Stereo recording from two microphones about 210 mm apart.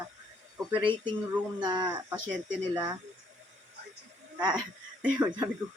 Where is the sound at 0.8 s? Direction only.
25° right (ahead or behind).